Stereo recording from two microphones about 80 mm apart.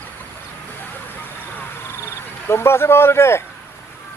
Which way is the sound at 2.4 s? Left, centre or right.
Left.